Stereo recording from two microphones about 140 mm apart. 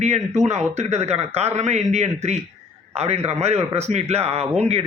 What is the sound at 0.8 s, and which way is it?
A man's voice, 50° right (ahead or behind).